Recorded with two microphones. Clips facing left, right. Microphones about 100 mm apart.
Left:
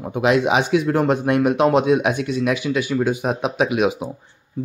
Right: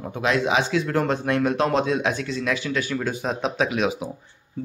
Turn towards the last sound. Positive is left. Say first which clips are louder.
# left 4 dB
turn(degrees=15)  # may be behind; listen again after turning